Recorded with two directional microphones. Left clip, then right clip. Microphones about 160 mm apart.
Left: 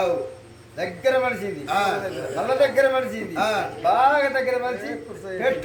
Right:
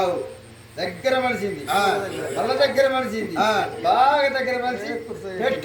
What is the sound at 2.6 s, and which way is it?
Speech, centre (ahead or behind).